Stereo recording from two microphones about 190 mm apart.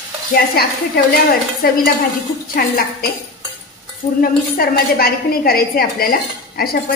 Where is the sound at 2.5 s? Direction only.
55° left (ahead or behind).